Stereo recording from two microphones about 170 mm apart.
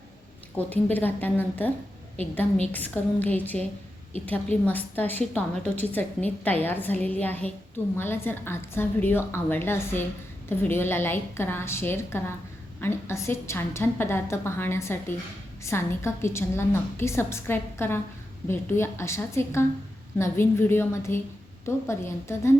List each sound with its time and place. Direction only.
0.5 s a woman's voice: 10° left (ahead or behind)